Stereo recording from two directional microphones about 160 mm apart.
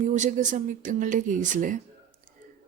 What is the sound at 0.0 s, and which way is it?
Speech, 50° right (ahead or behind).